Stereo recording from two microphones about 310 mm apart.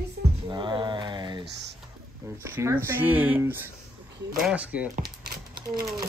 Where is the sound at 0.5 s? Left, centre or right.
Centre.